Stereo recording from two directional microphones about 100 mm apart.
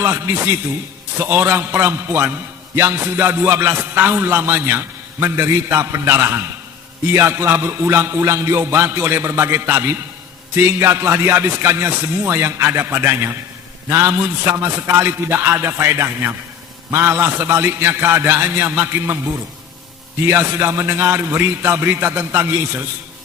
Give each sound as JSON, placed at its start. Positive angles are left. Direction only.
{"t": 0.0, "sound": "music", "side_deg": -25}